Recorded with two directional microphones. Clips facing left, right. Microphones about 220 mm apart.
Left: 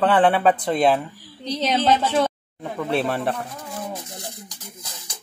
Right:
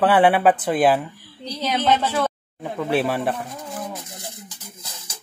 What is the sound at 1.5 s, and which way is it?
Speech, 25° left (ahead or behind).